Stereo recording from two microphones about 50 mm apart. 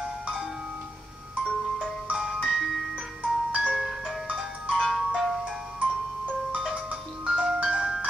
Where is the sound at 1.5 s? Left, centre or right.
Centre.